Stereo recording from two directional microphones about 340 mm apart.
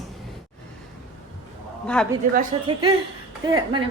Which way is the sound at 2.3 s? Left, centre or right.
Centre.